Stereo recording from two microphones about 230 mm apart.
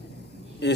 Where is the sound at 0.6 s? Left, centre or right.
Left.